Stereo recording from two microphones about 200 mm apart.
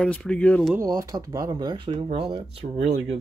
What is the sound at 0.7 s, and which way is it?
Speech, 15° right (ahead or behind).